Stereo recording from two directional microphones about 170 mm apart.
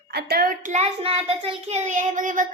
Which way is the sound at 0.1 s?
70° right (ahead or behind).